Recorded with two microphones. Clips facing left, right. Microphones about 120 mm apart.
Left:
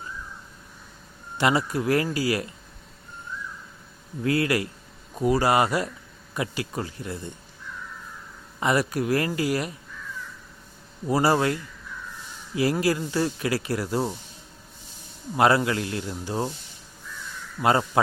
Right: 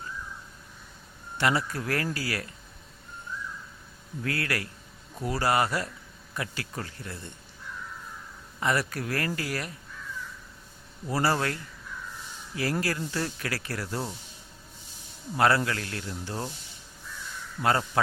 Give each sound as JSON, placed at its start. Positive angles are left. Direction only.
{"t": 1.4, "sound": "speech", "side_deg": 15}
{"t": 4.2, "sound": "speech", "side_deg": 20}
{"t": 8.6, "sound": "speech", "side_deg": 15}
{"t": 11.0, "sound": "speech", "side_deg": 15}
{"t": 12.8, "sound": "speech", "side_deg": 15}
{"t": 15.4, "sound": "speech", "side_deg": 15}
{"t": 17.6, "sound": "a man's voice", "side_deg": 20}